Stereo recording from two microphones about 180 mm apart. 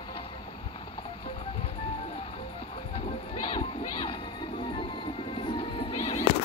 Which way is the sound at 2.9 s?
30° left (ahead or behind).